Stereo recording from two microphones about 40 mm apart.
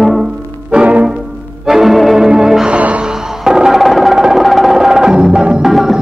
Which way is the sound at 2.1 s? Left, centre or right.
Centre.